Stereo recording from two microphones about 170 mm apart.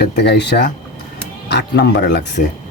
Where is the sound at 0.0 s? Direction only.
80° left.